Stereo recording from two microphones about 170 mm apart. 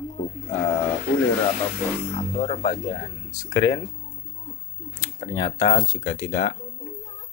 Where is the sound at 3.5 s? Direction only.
20° left (ahead or behind).